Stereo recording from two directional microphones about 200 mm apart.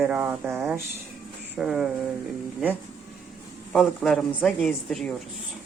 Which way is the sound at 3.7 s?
Centre (ahead or behind).